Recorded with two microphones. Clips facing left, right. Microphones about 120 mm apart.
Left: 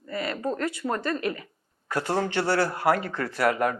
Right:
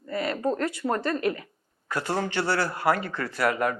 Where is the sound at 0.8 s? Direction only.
25° right (ahead or behind).